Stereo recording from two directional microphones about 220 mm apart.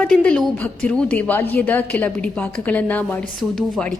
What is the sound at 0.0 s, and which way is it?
A woman's voice, 5° left (ahead or behind).